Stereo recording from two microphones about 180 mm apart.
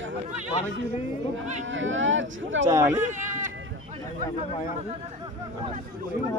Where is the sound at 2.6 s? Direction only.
15° right (ahead or behind).